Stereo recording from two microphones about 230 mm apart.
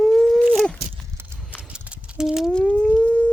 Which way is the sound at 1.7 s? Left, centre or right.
Centre.